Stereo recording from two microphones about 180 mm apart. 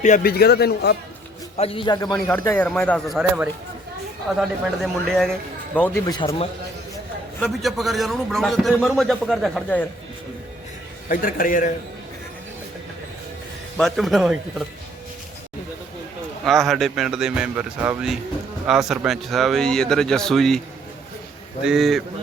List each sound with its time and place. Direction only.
0.0 s a man's voice: 50° left (ahead or behind); by 0.9 s 65° left (ahead or behind)
1.5 s a man's voice: 30° left (ahead or behind); by 3.2 s 5° left (ahead or behind)
3.2 s a man's voice: 5° right (ahead or behind)
6.1 s a man's voice: 30° left (ahead or behind)
7.3 s a man's voice: centre (ahead or behind)
11.1 s a man's voice: 50° left (ahead or behind)
13.7 s a man's voice: centre (ahead or behind)
16.5 s a man's voice: centre (ahead or behind)
21.6 s a man's voice: centre (ahead or behind)